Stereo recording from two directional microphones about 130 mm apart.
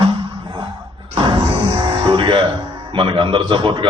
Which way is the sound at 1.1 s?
40° right (ahead or behind).